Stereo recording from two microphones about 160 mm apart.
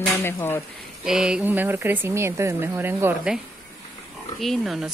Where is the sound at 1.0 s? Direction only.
5° right (ahead or behind).